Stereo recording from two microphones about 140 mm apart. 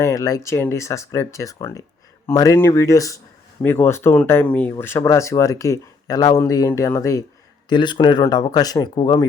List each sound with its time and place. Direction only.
0.0 s speech: 25° left (ahead or behind)
7.7 s speech: 35° left (ahead or behind)